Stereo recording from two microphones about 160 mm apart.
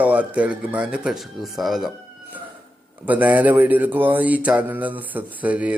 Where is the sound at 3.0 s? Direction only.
10° right (ahead or behind).